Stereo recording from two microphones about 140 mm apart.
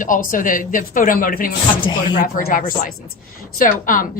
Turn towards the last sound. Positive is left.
turn(degrees=75)  # may be behind; listen again after turning